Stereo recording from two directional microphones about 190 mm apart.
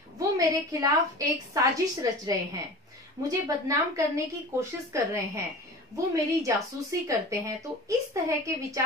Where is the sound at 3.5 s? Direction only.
15° right (ahead or behind).